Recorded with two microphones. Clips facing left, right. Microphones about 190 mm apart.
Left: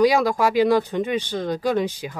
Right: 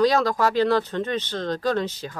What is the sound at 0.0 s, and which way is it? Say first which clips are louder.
Speech: left 2 dB; 10° left (ahead or behind).